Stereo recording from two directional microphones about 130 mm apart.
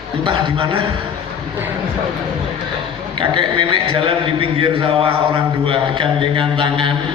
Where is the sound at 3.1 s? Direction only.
40° right (ahead or behind).